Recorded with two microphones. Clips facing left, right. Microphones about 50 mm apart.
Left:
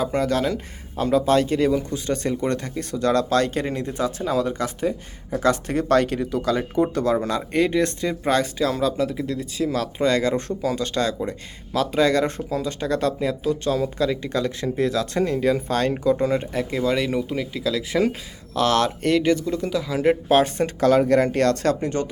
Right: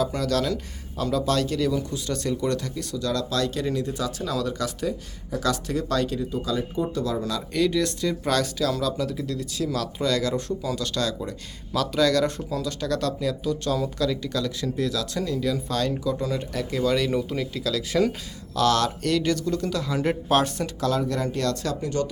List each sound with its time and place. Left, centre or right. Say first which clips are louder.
0.0 s speech: left 3 dB; left; by 20.4 s centre
20.8 s speech: left 8 dB; left